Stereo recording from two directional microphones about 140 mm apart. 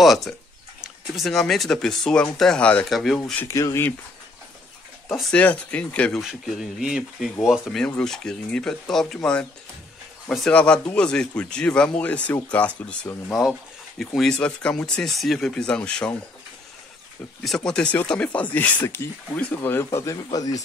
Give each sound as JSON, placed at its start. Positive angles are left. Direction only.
{"t": 0.0, "sound": "speech", "side_deg": 0}
{"t": 3.4, "sound": "speech", "side_deg": 20}
{"t": 5.0, "sound": "speech", "side_deg": 0}
{"t": 5.3, "sound": "speech", "side_deg": 10}
{"t": 13.3, "sound": "speech", "side_deg": 0}
{"t": 17.4, "sound": "speech", "side_deg": 5}